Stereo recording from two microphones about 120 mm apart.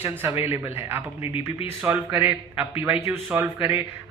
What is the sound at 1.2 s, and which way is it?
Speech, 50° left (ahead or behind).